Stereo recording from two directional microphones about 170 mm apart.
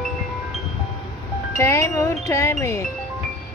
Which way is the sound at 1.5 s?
15° left (ahead or behind).